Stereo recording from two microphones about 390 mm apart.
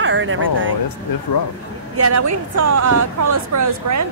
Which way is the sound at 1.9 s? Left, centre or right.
Right.